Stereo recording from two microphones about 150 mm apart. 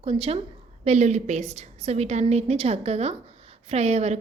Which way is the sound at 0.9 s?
50° right (ahead or behind).